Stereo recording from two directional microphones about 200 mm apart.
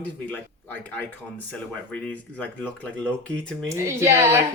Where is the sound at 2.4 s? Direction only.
5° left (ahead or behind).